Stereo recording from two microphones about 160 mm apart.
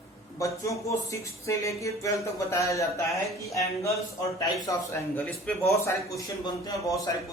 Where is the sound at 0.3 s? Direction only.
20° left (ahead or behind).